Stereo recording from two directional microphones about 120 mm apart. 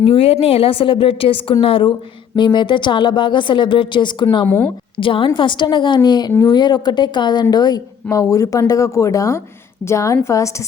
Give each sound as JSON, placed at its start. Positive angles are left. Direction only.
{"t": 0.0, "sound": "a woman's voice", "side_deg": 50}
{"t": 4.4, "sound": "a woman's voice", "side_deg": 15}
{"t": 4.9, "sound": "a woman's voice", "side_deg": 45}